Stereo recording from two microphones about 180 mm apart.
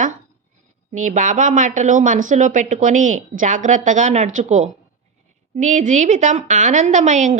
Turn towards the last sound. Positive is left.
turn(degrees=-40)  # may be behind; listen again after turning